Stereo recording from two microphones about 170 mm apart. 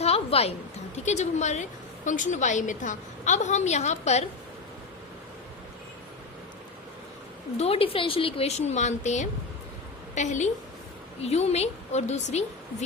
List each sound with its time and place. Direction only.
0.0 s a sound: 35° left (ahead or behind)
0.9 s a woman's voice: 40° left (ahead or behind)
7.5 s a woman's voice: 35° left (ahead or behind)